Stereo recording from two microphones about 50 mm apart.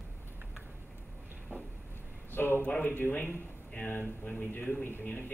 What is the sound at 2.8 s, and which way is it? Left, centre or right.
Speech, left.